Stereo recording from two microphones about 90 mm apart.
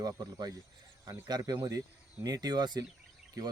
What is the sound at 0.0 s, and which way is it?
Speech, 50° right (ahead or behind).